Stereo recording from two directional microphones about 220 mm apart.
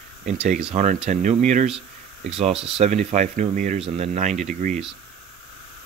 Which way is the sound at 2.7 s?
30° right (ahead or behind).